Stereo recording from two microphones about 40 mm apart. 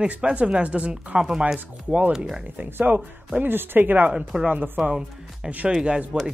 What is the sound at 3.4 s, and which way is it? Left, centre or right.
Speech, right.